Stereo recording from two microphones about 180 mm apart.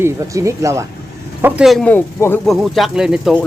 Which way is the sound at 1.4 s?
5° right (ahead or behind).